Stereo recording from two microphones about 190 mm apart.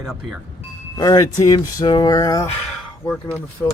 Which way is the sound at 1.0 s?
20° left (ahead or behind).